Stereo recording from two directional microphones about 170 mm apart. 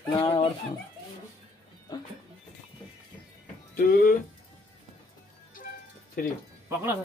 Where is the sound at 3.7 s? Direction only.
55° left (ahead or behind).